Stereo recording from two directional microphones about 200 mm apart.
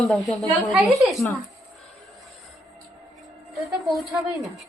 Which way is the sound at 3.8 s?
Centre (ahead or behind).